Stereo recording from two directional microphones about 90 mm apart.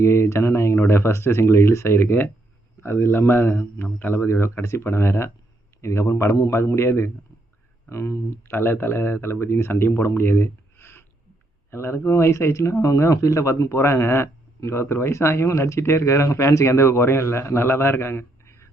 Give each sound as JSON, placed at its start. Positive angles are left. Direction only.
{"t": 0.0, "sound": "speech", "side_deg": 30}